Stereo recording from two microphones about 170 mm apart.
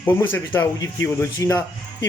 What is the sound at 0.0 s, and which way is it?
Speech, 10° left (ahead or behind).